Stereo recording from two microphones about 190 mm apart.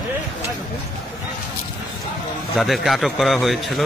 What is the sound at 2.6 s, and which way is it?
A man's voice, centre (ahead or behind).